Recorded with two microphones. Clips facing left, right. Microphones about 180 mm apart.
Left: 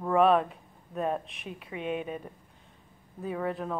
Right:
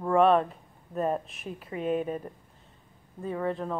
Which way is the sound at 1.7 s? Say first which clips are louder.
Right 4 dB; 40° right (ahead or behind).